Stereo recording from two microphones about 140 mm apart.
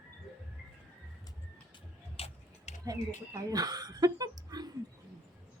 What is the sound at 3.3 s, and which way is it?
Speech, 25° right (ahead or behind).